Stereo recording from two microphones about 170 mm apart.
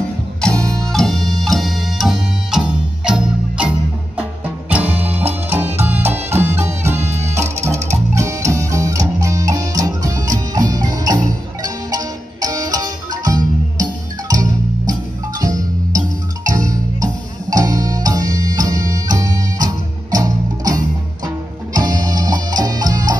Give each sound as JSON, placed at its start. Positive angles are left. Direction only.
{"t": 0.4, "sound": "music", "side_deg": 5}
{"t": 3.1, "sound": "marimba", "side_deg": -5}
{"t": 4.6, "sound": "music", "side_deg": -10}